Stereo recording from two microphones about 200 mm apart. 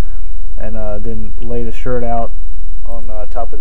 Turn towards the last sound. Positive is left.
turn(degrees=10)  # may be behind; listen again after turning